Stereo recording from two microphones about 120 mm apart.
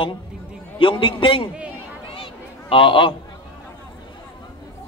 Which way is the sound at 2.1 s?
50° left (ahead or behind).